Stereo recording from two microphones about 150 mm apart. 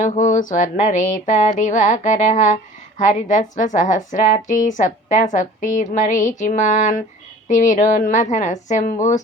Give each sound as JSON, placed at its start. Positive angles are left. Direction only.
{"t": 0.0, "sound": "a woman's voice", "side_deg": 60}